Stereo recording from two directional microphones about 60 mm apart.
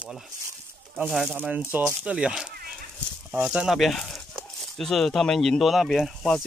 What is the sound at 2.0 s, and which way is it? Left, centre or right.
Speech, centre.